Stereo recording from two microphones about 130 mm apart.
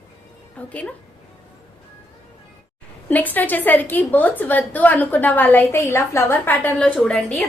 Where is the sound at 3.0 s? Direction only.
15° left (ahead or behind).